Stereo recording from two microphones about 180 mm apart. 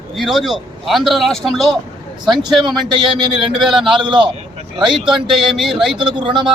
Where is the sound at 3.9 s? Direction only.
25° right (ahead or behind).